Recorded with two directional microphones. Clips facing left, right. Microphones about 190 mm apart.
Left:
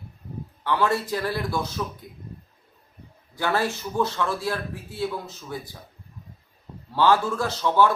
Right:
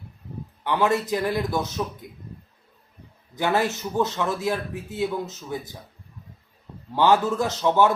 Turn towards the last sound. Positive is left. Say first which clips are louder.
# right 1 dB
turn(degrees=-20)  # may be behind; listen again after turning